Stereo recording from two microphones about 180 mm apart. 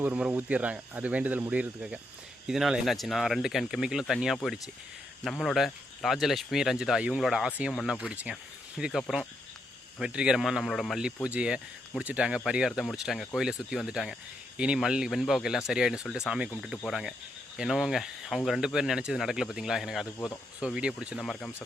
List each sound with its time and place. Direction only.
0.0 s speech: 5° right (ahead or behind)